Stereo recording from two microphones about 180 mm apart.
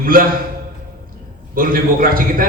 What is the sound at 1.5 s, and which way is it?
Speech, 50° right (ahead or behind).